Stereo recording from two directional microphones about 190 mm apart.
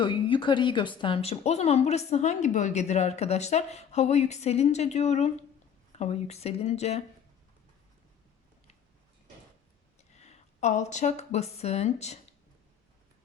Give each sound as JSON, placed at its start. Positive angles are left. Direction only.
{"t": 0.0, "sound": "a woman's voice", "side_deg": 25}
{"t": 10.0, "sound": "speech", "side_deg": 35}